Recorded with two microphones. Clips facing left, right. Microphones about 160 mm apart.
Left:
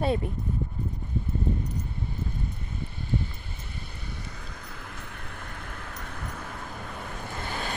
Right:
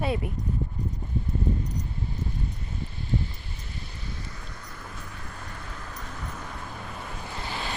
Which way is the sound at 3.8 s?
60° left (ahead or behind).